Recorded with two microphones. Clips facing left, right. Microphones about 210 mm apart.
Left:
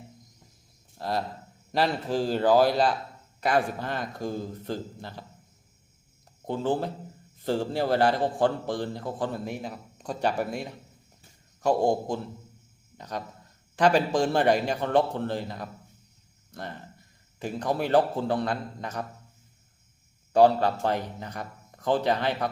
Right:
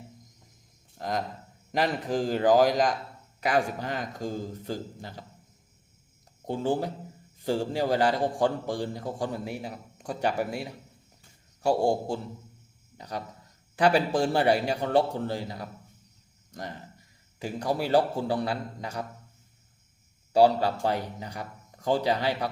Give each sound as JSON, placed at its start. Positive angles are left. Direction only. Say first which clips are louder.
{"t": 0.9, "sound": "a man's voice", "louder": "left 1 dB", "side_deg": -15}
{"t": 6.5, "sound": "a man's voice", "louder": "even", "side_deg": -15}
{"t": 13.0, "sound": "a man's voice", "louder": "left 1 dB", "side_deg": -10}
{"t": 20.3, "sound": "a man's voice", "louder": "left 1 dB", "side_deg": -10}